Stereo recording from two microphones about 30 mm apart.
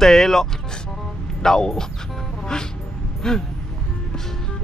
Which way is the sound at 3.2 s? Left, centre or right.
Left.